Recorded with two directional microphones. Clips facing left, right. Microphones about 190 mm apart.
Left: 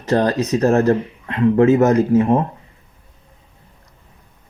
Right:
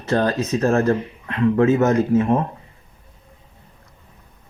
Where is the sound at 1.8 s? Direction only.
35° left (ahead or behind).